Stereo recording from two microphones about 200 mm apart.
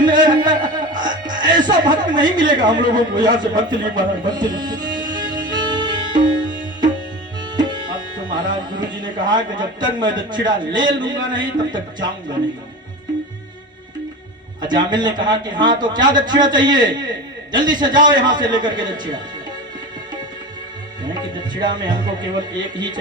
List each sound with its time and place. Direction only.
0.4 s music: 20° right (ahead or behind)
8.5 s a man's voice: 20° right (ahead or behind)
14.6 s a man's voice: 20° right (ahead or behind)
21.0 s a man's voice: 20° right (ahead or behind)